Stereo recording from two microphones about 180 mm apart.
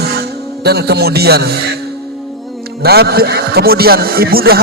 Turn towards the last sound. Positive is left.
turn(degrees=-55)  # may be behind; listen again after turning